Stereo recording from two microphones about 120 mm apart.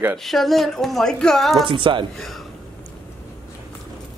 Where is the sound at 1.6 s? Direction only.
45° right (ahead or behind).